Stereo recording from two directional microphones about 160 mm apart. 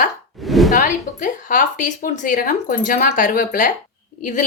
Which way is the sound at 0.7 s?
55° left (ahead or behind).